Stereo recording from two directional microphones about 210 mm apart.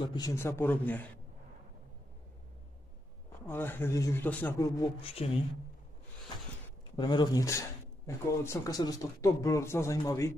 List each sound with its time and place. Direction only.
0.0 s speech: 20° left (ahead or behind)
3.4 s speech: 10° left (ahead or behind)
5.0 s speech: 25° left (ahead or behind)
7.0 s speech: 20° left (ahead or behind)